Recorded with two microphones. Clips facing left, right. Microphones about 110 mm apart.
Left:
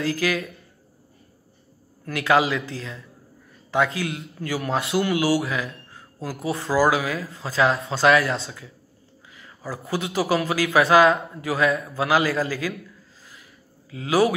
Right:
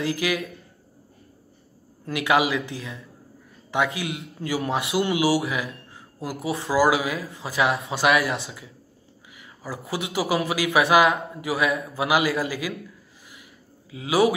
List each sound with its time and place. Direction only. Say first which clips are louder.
0.0 s a man's voice: left 1 dB; 20° right (ahead or behind)
2.0 s a man's voice: left 1 dB; 20° right (ahead or behind)
13.8 s speech: even; 15° right (ahead or behind)